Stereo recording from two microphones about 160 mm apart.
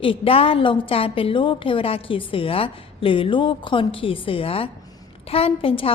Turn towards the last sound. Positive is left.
turn(degrees=35)  # may be behind; listen again after turning